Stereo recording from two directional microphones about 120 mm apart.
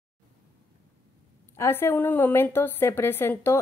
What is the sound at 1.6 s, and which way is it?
A woman's voice, 20° left (ahead or behind).